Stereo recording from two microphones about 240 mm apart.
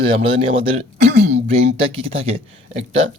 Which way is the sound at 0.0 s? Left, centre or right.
Right.